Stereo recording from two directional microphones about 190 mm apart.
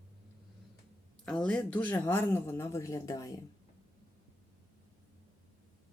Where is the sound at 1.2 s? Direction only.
5° left (ahead or behind).